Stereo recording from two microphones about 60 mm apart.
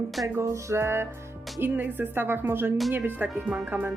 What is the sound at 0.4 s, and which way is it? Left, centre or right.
Music, right.